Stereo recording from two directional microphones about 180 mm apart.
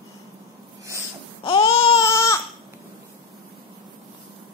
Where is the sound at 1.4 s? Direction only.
30° left (ahead or behind).